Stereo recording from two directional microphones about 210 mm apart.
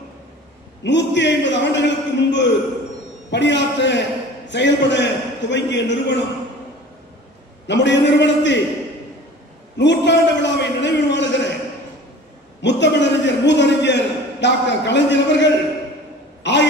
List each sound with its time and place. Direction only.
0.8 s a man's voice: 55° left (ahead or behind)
7.6 s a man's voice: 55° left (ahead or behind)
9.8 s a man's voice: 55° left (ahead or behind)
12.6 s a man's voice: 55° left (ahead or behind)
16.5 s a sound: 55° left (ahead or behind)